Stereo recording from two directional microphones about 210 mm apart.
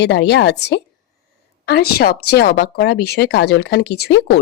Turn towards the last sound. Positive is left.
turn(degrees=55)  # may be behind; listen again after turning